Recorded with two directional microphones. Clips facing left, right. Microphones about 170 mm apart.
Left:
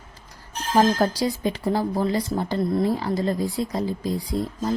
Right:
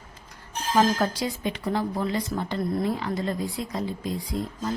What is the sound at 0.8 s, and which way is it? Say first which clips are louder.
Speech: left 3 dB; 35° left (ahead or behind).